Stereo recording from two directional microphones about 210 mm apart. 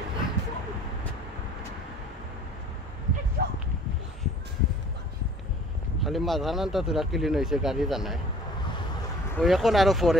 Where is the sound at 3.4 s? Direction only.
45° right (ahead or behind).